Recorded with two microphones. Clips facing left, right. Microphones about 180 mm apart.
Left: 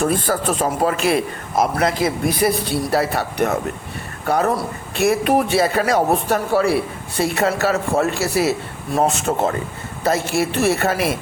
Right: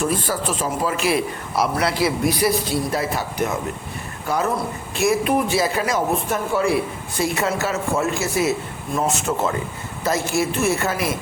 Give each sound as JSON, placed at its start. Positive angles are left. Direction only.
{"t": 0.0, "sound": "a man's voice", "side_deg": 55}
{"t": 2.4, "sound": "speech", "side_deg": 65}
{"t": 9.3, "sound": "a man's voice", "side_deg": 50}
{"t": 10.1, "sound": "speech", "side_deg": 65}